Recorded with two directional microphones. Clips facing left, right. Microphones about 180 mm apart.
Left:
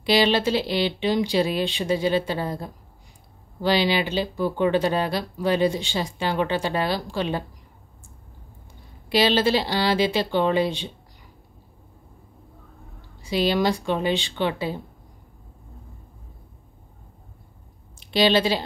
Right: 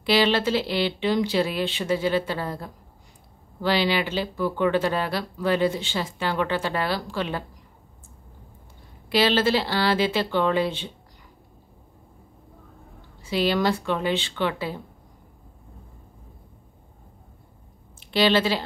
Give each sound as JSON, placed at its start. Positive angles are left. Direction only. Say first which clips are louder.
{"t": 0.0, "sound": "speech", "louder": "left 1 dB", "side_deg": 15}
{"t": 9.1, "sound": "speech", "louder": "left 1 dB", "side_deg": 15}
{"t": 13.2, "sound": "speech", "louder": "left 1 dB", "side_deg": 15}
{"t": 18.1, "sound": "speech", "louder": "left 1 dB", "side_deg": 15}